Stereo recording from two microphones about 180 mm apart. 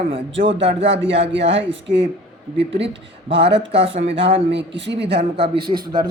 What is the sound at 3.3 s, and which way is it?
A woman's voice, 75° right (ahead or behind).